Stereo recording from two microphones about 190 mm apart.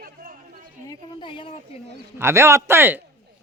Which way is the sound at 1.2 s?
25° left (ahead or behind).